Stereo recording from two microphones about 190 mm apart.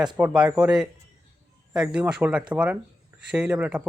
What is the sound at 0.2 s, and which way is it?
Speech, 5° right (ahead or behind).